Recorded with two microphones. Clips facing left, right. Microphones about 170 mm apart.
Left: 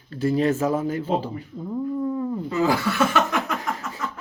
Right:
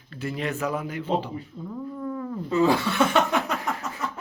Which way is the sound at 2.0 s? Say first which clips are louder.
Left 3 dB; 20° left (ahead or behind).